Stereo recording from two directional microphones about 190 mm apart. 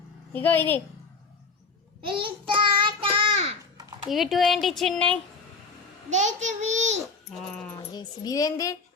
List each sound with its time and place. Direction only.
0.3 s a woman's voice: 10° left (ahead or behind)
2.0 s child singing: 25° right (ahead or behind)
3.8 s a sound: 20° right (ahead or behind)
4.1 s speech: centre (ahead or behind)
6.1 s a child's voice: 40° right (ahead or behind)
7.3 s dog: 5° left (ahead or behind)
7.9 s a woman's voice: 20° left (ahead or behind)